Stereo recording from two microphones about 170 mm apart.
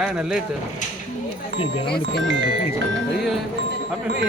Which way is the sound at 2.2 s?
90° right.